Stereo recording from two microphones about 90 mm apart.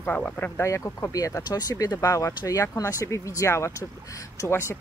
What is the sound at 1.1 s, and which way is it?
Speech, 40° left (ahead or behind).